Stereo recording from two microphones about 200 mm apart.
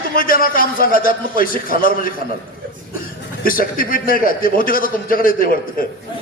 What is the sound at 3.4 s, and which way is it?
A man's voice, 45° left (ahead or behind).